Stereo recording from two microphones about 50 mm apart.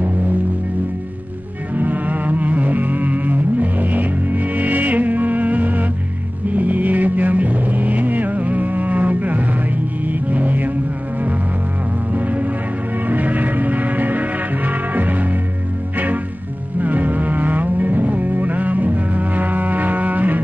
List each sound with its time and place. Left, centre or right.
1.7 s music: right
12.1 s music: right
16.8 s a sound: right